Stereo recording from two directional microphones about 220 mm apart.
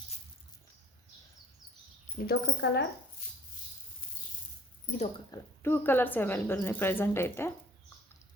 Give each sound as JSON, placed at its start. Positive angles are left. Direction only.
{"t": 2.1, "sound": "speech", "side_deg": 45}
{"t": 5.3, "sound": "speech", "side_deg": 10}